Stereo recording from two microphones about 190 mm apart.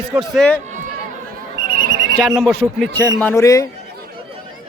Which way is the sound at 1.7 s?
55° right (ahead or behind).